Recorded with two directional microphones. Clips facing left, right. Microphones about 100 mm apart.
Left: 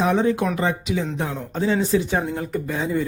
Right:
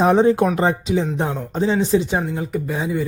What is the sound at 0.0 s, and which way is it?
A man's voice, 35° right (ahead or behind).